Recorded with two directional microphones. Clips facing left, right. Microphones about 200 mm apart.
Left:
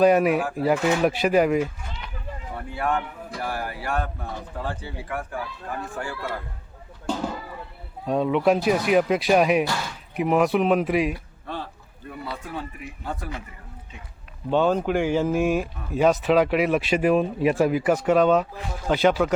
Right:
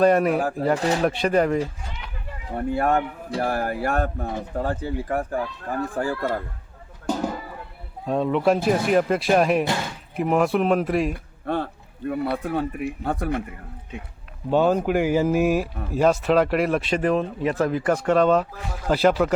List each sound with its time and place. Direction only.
0.0 s speech: centre (ahead or behind)
0.8 s speech: 35° right (ahead or behind)
1.0 s speech: 5° left (ahead or behind)
2.6 s speech: 45° right (ahead or behind)
7.1 s a sound: 10° right (ahead or behind)
8.0 s speech: centre (ahead or behind)
11.1 s speech: 55° right (ahead or behind)
14.5 s speech: 10° right (ahead or behind)